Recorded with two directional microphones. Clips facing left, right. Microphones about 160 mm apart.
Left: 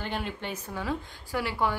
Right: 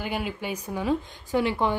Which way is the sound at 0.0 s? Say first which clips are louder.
Right 3 dB; 10° right (ahead or behind).